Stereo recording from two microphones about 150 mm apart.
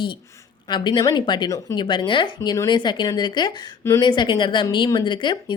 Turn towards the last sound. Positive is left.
turn(degrees=30)  # may be behind; listen again after turning